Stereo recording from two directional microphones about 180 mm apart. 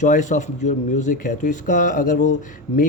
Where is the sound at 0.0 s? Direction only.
45° left (ahead or behind).